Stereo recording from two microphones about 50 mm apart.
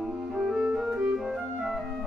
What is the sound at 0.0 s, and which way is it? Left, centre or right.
Music, centre.